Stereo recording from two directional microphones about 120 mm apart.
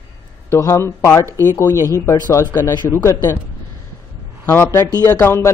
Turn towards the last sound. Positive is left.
turn(degrees=20)  # may be behind; listen again after turning